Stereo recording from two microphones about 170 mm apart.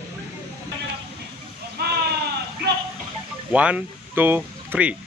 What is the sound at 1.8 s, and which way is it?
Sheep, 70° right (ahead or behind).